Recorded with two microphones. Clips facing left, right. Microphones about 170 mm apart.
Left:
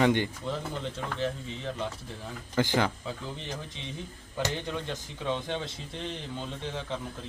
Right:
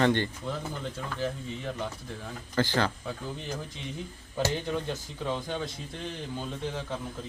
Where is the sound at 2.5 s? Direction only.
15° left (ahead or behind).